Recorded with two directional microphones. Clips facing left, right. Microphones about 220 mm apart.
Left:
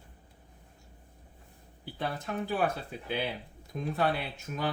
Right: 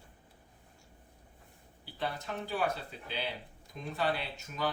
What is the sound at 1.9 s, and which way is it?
Speech, 55° left (ahead or behind).